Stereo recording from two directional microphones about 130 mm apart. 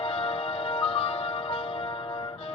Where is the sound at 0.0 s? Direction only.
45° left (ahead or behind).